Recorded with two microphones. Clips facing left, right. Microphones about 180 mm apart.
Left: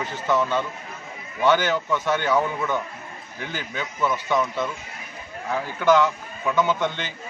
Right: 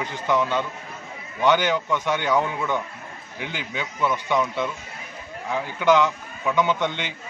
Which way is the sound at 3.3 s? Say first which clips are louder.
Even; 15° right (ahead or behind).